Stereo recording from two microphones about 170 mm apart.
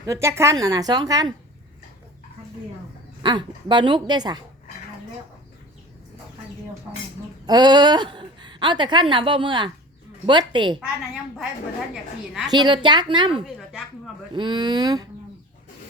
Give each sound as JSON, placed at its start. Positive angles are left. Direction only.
{"t": 0.0, "sound": "a woman's voice", "side_deg": -15}
{"t": 3.2, "sound": "a woman's voice", "side_deg": -25}
{"t": 7.4, "sound": "a woman's voice", "side_deg": -25}
{"t": 10.8, "sound": "a woman's voice", "side_deg": 0}
{"t": 12.5, "sound": "a woman's voice", "side_deg": -25}